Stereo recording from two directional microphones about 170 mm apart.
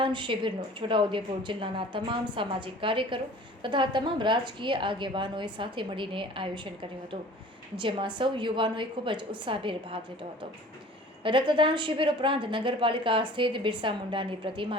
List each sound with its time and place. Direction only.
0.0 s a woman's voice: 30° right (ahead or behind)
7.8 s a woman's voice: 30° right (ahead or behind)
11.2 s a woman's voice: 30° right (ahead or behind)